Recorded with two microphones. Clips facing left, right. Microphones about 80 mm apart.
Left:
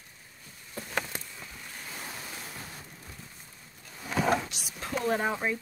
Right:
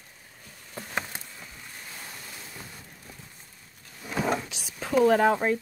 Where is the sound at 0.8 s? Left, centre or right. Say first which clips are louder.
Even; right.